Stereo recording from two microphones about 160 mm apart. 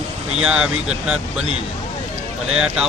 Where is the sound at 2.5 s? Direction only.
5° right (ahead or behind).